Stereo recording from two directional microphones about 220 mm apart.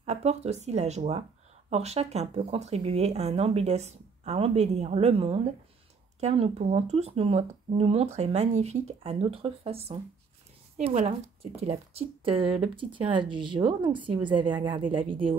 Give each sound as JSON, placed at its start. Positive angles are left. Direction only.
{"t": 0.0, "sound": "speech", "side_deg": -30}